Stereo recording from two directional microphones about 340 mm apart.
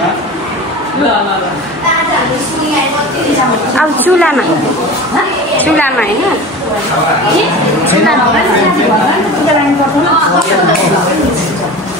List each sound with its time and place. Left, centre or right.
3.7 s speech: centre
5.6 s speech: centre